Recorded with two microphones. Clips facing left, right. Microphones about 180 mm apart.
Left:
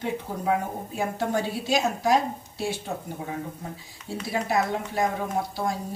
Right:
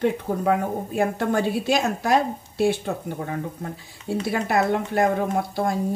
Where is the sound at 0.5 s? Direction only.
60° right (ahead or behind).